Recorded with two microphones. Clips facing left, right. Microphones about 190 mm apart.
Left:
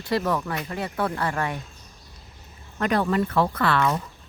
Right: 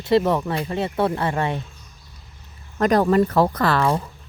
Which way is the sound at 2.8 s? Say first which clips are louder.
Right 6 dB; 40° right (ahead or behind).